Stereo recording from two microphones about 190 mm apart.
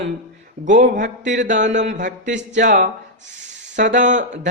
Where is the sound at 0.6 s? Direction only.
40° right (ahead or behind).